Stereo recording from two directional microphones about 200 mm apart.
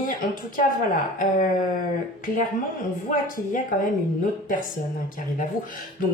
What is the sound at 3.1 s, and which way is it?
Speech, 45° left (ahead or behind).